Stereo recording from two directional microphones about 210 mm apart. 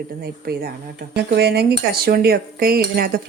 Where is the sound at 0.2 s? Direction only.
45° right (ahead or behind).